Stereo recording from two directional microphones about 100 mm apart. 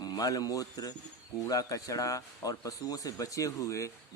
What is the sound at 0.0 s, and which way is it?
A man's voice, 40° left (ahead or behind).